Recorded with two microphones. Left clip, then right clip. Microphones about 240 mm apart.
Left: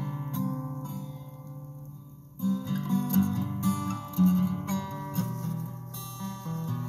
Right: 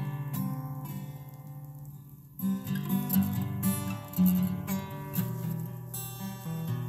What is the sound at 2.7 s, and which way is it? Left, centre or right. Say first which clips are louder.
Music: left 2 dB; right.